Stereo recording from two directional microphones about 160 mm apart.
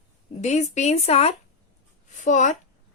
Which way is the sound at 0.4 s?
45° left (ahead or behind).